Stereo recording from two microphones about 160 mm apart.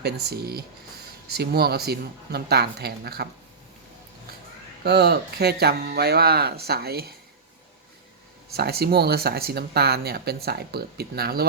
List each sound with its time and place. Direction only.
0.0 s speech: 90° right
4.8 s speech: 80° right
8.5 s speech: 80° right